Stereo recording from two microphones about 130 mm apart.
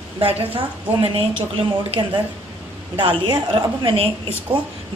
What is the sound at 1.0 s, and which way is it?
A woman's voice, 45° right (ahead or behind).